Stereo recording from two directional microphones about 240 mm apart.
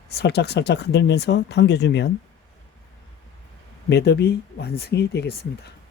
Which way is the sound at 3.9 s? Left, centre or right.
Left.